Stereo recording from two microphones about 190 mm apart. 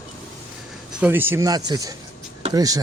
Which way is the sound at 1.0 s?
10° right (ahead or behind).